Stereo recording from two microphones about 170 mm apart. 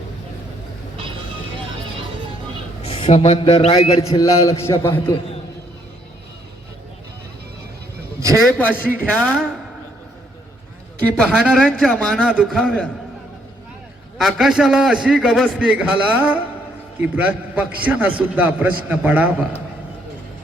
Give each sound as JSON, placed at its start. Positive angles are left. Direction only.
{"t": 2.8, "sound": "a man's voice", "side_deg": 35}
{"t": 4.1, "sound": "a man's voice", "side_deg": 20}
{"t": 8.5, "sound": "speech", "side_deg": 10}
{"t": 11.2, "sound": "a man's voice", "side_deg": 5}
{"t": 14.2, "sound": "a man's voice", "side_deg": 0}